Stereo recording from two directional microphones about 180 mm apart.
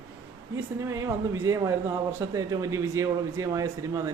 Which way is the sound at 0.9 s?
15° right (ahead or behind).